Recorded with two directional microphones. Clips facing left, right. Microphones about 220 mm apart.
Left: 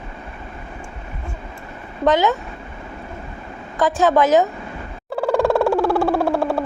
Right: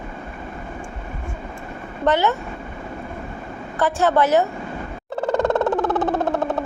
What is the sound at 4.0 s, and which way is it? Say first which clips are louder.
Speech: left 2 dB; 15° left (ahead or behind).